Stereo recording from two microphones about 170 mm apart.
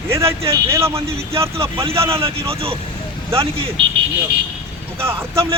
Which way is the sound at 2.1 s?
35° right (ahead or behind).